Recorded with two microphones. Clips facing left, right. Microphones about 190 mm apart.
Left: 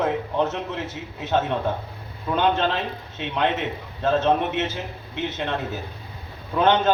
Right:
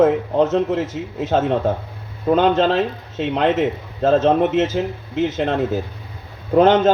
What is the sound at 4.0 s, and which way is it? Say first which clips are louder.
A man's voice: right 6 dB; 40° right (ahead or behind).